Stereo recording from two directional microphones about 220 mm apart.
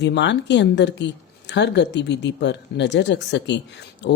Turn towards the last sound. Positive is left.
turn(degrees=50)  # may be behind; listen again after turning